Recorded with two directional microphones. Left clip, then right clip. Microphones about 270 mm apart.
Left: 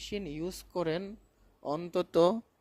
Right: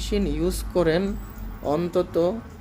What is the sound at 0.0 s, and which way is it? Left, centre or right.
Speech, left.